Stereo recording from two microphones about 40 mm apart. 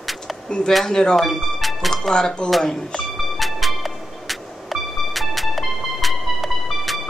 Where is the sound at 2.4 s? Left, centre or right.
Centre.